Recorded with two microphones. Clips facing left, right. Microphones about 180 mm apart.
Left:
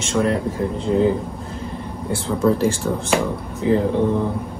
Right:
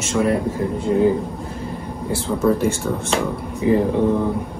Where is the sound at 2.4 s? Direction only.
Centre (ahead or behind).